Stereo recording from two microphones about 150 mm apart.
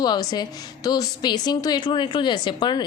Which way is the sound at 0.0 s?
25° left (ahead or behind).